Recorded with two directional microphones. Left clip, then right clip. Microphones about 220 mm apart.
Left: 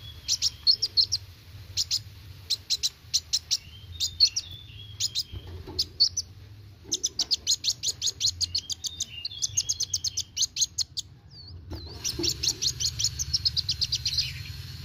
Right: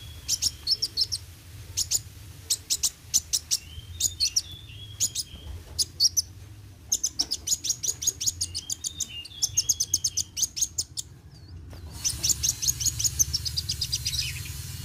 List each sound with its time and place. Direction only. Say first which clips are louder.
0.3 s chirp: left 3 dB; 15° left (ahead or behind)
0.9 s bird: left 4 dB; 15° left (ahead or behind)
4.9 s chirp: left 1 dB; 15° left (ahead or behind)
5.8 s bird: even; 5° left (ahead or behind)
6.9 s bird: left 1 dB; 15° left (ahead or behind)
9.7 s chirp: right 2 dB; 15° left (ahead or behind)
12.0 s bird: even; 10° left (ahead or behind)